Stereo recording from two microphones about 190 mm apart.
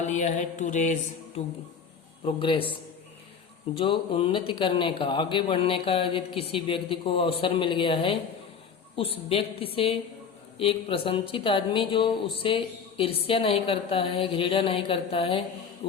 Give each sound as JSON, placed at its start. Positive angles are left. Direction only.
{"t": 0.0, "sound": "mantra", "side_deg": 35}
{"t": 2.2, "sound": "speech", "side_deg": 30}
{"t": 3.8, "sound": "speech", "side_deg": 25}